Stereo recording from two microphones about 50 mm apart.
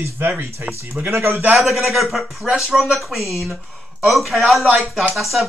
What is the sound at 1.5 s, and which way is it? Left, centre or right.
Speech, centre.